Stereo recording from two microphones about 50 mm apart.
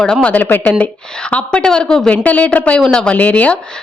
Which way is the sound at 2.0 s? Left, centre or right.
Left.